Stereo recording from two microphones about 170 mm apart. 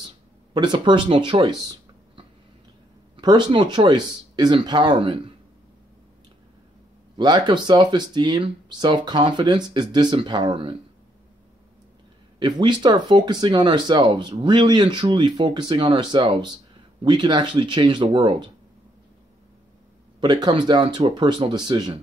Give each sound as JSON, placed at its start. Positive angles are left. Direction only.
{"t": 0.6, "sound": "speech", "side_deg": -25}
{"t": 7.2, "sound": "speech", "side_deg": -25}
{"t": 12.4, "sound": "speech", "side_deg": -25}
{"t": 20.2, "sound": "speech", "side_deg": -25}